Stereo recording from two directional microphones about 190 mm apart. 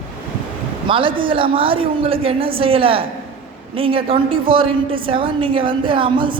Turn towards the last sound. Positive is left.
turn(degrees=-25)  # may be behind; listen again after turning